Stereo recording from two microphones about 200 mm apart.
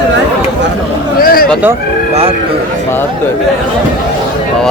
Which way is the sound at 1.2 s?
45° left (ahead or behind).